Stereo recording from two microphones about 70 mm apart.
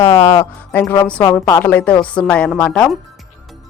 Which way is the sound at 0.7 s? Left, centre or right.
Left.